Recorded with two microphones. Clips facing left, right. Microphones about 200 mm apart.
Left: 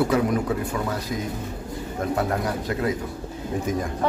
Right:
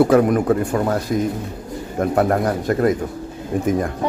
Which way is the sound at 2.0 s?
50° right (ahead or behind).